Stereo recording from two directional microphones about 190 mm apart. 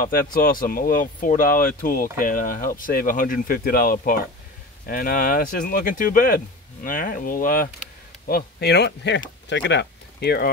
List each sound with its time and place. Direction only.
0.0 s speech: 50° left (ahead or behind)